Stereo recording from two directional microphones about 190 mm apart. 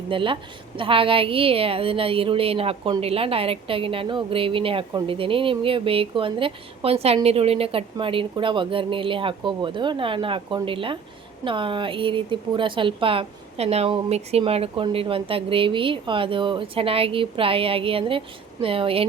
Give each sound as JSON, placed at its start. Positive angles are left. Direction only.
{"t": 0.1, "sound": "a woman's voice", "side_deg": -25}